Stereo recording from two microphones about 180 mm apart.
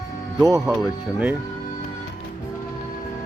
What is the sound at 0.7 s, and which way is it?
Speech, 5° right (ahead or behind).